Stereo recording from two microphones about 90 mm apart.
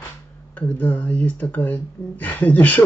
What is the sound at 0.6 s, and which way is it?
Speech, 15° left (ahead or behind).